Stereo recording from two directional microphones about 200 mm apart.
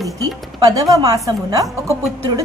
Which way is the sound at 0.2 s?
15° right (ahead or behind).